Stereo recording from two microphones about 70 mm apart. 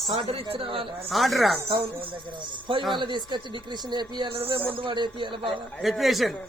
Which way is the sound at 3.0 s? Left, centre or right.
Right.